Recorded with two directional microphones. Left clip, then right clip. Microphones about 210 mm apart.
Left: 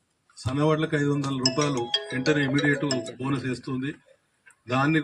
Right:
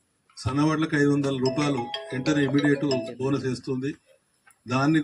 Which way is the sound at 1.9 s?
55° left (ahead or behind).